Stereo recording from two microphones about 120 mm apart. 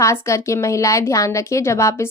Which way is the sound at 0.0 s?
25° left (ahead or behind).